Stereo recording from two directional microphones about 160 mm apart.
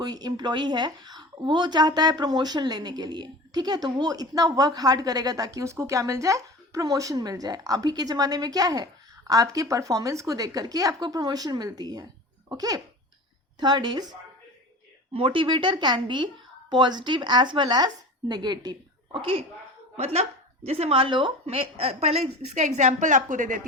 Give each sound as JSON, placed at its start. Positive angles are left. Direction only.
{"t": 0.0, "sound": "a woman's voice", "side_deg": -25}